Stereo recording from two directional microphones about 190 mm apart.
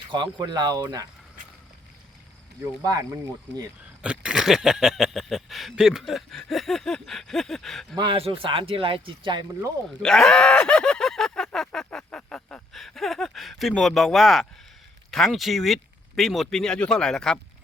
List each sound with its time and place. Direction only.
0.1 s speech: 25° right (ahead or behind)
2.8 s speech: 20° right (ahead or behind)
3.5 s speech: 70° right (ahead or behind)
4.0 s speech: 5° right (ahead or behind)
7.9 s speech: 25° right (ahead or behind)
10.0 s speech: 5° left (ahead or behind)